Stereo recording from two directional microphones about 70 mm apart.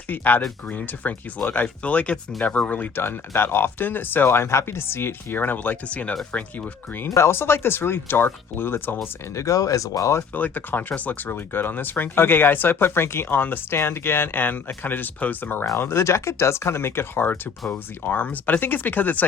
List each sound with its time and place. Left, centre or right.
0.1 s speech: left
7.1 s speech: left
9.3 s speech: left
10.3 s speech: left